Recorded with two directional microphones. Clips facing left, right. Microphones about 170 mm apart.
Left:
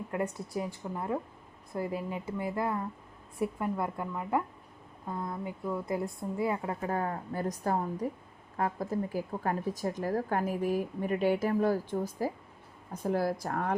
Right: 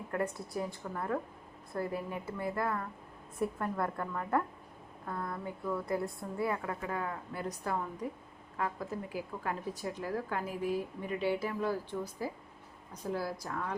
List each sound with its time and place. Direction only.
0.1 s a woman's voice: 20° left (ahead or behind)
6.8 s a woman's voice: 40° left (ahead or behind)
12.9 s a woman's voice: 55° left (ahead or behind)